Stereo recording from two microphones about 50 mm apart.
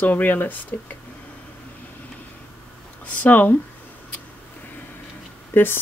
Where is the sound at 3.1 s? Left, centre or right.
Left.